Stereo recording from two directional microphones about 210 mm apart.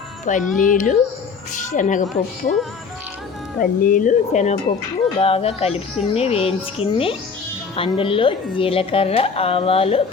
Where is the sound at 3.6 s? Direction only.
40° left (ahead or behind).